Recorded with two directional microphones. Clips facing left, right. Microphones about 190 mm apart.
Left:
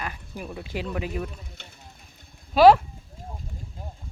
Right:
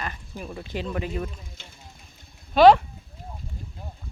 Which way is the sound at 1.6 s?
65° left (ahead or behind).